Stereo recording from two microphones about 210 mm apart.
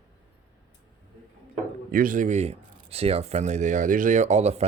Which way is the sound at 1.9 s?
40° right (ahead or behind).